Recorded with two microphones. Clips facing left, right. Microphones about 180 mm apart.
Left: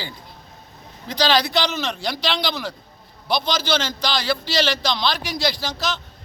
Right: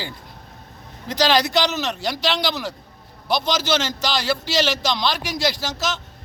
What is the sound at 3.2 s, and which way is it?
Speech, 45° right (ahead or behind).